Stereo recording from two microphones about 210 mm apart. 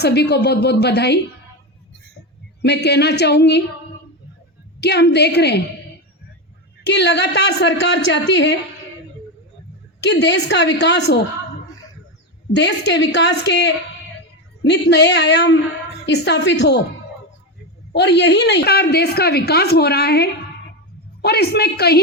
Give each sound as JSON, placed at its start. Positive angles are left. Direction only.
{"t": 0.0, "sound": "a woman's voice", "side_deg": 50}
{"t": 2.6, "sound": "a woman's voice", "side_deg": 50}
{"t": 4.8, "sound": "a woman's voice", "side_deg": 50}
{"t": 6.8, "sound": "a woman's voice", "side_deg": 55}
{"t": 10.0, "sound": "a woman's voice", "side_deg": 55}
{"t": 12.5, "sound": "a woman's voice", "side_deg": 55}
{"t": 17.9, "sound": "a woman's voice", "side_deg": 55}